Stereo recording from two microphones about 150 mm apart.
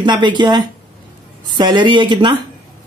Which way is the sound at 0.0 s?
30° right (ahead or behind).